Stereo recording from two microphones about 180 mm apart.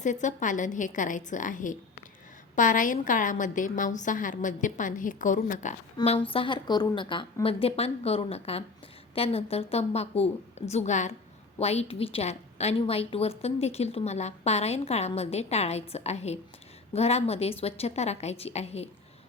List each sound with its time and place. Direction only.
0.0 s a woman's voice: 45° left (ahead or behind)
6.1 s a woman's voice: 30° left (ahead or behind)